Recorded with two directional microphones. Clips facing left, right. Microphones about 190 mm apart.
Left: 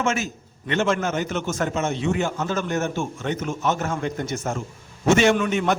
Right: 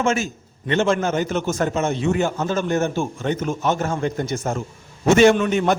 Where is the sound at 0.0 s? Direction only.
30° right (ahead or behind).